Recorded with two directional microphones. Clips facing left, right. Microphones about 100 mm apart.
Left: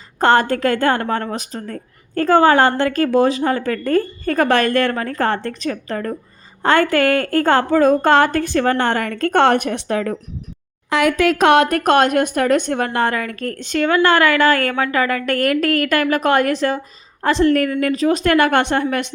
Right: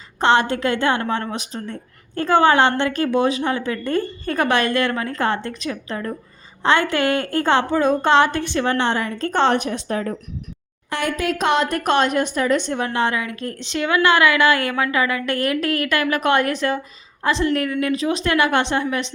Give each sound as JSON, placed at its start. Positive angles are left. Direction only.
{"t": 0.2, "sound": "a woman's voice", "side_deg": 45}
{"t": 10.8, "sound": "a woman's voice", "side_deg": 90}
{"t": 11.8, "sound": "a woman's voice", "side_deg": 50}